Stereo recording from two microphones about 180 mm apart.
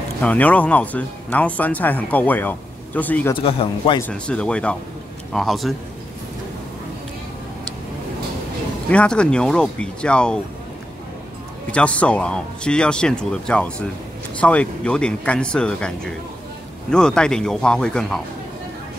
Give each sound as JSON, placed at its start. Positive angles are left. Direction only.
{"t": 0.2, "sound": "speech", "side_deg": 10}
{"t": 3.3, "sound": "speech", "side_deg": 30}
{"t": 4.0, "sound": "speech", "side_deg": 5}
{"t": 8.9, "sound": "speech", "side_deg": 5}
{"t": 11.7, "sound": "speech", "side_deg": 5}